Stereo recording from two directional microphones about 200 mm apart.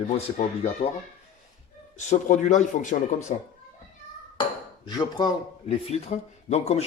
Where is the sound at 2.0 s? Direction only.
35° left (ahead or behind).